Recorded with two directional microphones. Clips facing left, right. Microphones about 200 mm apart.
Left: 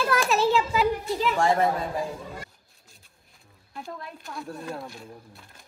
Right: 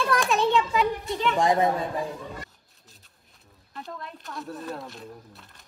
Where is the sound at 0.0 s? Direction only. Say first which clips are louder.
Even; 5° left (ahead or behind).